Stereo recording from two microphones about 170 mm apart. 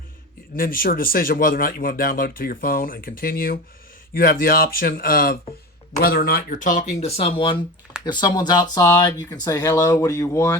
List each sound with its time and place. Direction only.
0.5 s speech: 55° left (ahead or behind); by 10.6 s 15° left (ahead or behind)